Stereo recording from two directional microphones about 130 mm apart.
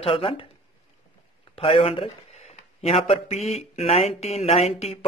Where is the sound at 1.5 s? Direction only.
50° left (ahead or behind).